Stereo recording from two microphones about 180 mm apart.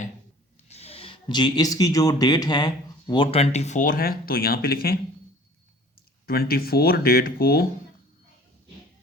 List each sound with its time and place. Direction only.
0.7 s speech: 35° left (ahead or behind); by 4.9 s 55° left (ahead or behind)
6.2 s speech: 60° left (ahead or behind)